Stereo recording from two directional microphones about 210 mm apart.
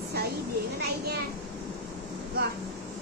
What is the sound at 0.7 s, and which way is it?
Children playing, 45° right (ahead or behind).